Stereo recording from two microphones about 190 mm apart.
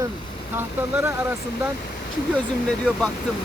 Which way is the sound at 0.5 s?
10° right (ahead or behind).